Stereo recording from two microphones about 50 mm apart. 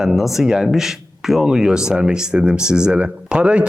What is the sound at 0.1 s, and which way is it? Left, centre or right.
Speech, centre.